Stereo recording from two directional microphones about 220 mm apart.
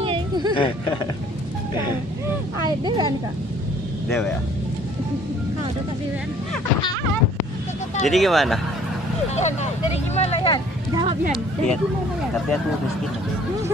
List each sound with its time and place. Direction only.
0.0 s a sound: 20° right (ahead or behind)
2.6 s speech: 20° right (ahead or behind)
4.1 s speech: 10° left (ahead or behind)
8.0 s speech: centre (ahead or behind)
9.3 s speech: 30° left (ahead or behind)